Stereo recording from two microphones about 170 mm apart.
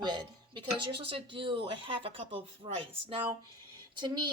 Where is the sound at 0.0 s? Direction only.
25° right (ahead or behind).